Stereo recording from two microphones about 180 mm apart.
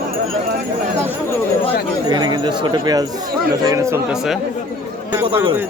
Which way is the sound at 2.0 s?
25° right (ahead or behind).